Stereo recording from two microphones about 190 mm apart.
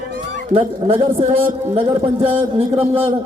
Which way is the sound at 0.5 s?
30° right (ahead or behind).